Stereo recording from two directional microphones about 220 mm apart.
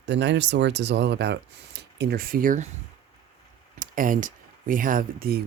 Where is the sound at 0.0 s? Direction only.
50° right (ahead or behind).